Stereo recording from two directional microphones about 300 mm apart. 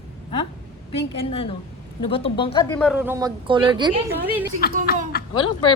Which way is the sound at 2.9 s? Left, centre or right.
Centre.